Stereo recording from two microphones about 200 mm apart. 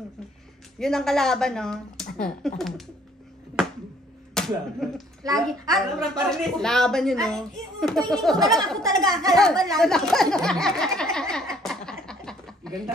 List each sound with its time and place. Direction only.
0.7 s speech: centre (ahead or behind)
4.3 s speech: centre (ahead or behind)
9.0 s speech: 20° right (ahead or behind)
9.3 s speech: centre (ahead or behind)
9.8 s a sound: centre (ahead or behind)